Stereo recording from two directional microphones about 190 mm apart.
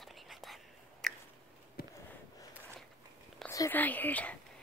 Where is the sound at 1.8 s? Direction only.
55° left (ahead or behind).